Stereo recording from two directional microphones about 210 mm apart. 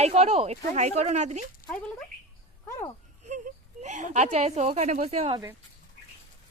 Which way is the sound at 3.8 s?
35° right (ahead or behind).